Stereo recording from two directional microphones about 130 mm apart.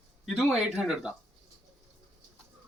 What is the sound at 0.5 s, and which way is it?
Speech, 5° right (ahead or behind).